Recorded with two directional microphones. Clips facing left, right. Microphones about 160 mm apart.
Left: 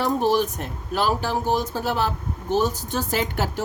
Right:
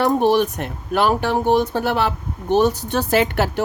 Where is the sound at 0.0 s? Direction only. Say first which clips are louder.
Right 5 dB; 65° right (ahead or behind).